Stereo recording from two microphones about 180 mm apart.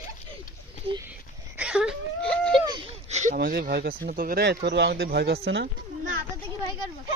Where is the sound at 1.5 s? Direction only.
5° right (ahead or behind).